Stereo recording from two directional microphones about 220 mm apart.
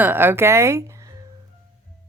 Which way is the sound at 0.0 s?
10° right (ahead or behind).